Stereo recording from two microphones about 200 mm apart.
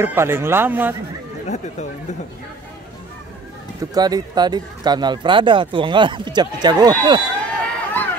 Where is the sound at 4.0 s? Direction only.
20° right (ahead or behind).